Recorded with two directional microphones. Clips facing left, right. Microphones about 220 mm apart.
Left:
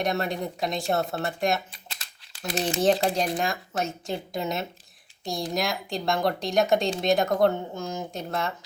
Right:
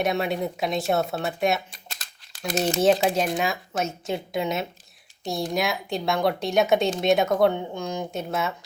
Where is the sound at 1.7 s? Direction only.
45° right (ahead or behind).